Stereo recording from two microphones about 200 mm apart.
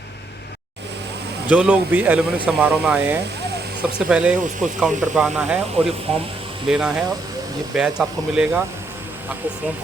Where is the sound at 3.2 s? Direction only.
55° right (ahead or behind).